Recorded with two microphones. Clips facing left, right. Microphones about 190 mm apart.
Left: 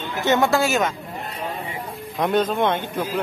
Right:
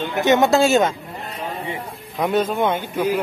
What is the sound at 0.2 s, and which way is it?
Speech, 20° right (ahead or behind).